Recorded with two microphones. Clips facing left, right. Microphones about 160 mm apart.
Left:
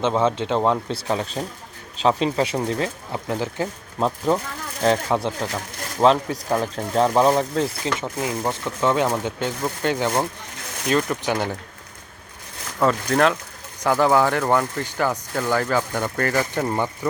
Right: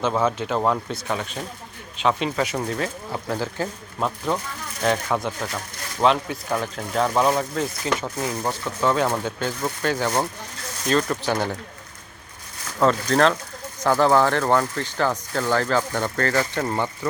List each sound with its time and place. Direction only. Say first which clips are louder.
0.0 s speech: left 2 dB; 25° left (ahead or behind)
4.8 s speech: left 3 dB; 30° left (ahead or behind)
6.0 s speech: left 3 dB; 35° left (ahead or behind)
8.2 s speech: left 1 dB; 15° left (ahead or behind)
12.8 s speech: even; 10° left (ahead or behind)